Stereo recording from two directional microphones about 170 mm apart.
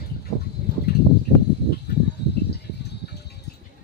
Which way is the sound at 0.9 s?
70° left (ahead or behind).